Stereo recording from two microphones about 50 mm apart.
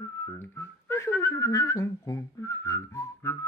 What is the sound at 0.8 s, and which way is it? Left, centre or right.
Whistling, left.